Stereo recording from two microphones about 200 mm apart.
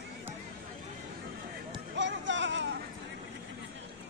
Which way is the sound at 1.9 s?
65° right (ahead or behind).